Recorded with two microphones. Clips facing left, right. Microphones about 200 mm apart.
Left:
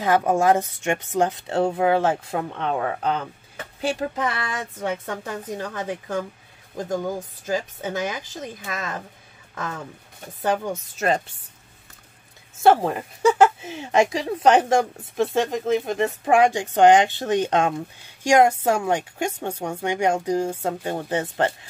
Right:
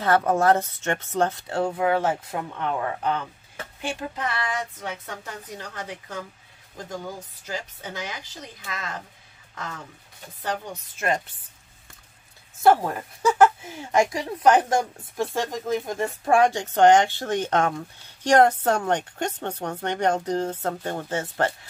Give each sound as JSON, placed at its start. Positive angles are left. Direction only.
{"t": 0.0, "sound": "speech", "side_deg": 15}
{"t": 4.7, "sound": "a woman's voice", "side_deg": 50}
{"t": 10.4, "sound": "a woman's voice", "side_deg": 45}
{"t": 12.6, "sound": "speech", "side_deg": 20}